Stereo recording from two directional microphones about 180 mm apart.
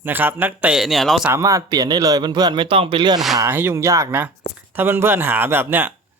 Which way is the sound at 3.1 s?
Centre (ahead or behind).